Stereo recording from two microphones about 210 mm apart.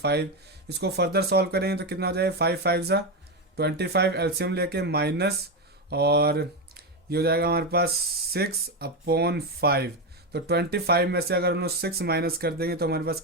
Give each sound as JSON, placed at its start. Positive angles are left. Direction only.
{"t": 0.0, "sound": "speech", "side_deg": -50}